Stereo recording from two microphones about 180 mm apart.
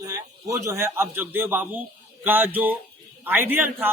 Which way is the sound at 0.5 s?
15° right (ahead or behind).